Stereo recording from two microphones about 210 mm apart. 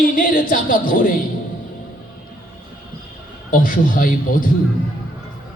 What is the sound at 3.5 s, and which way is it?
Speech, 40° left (ahead or behind).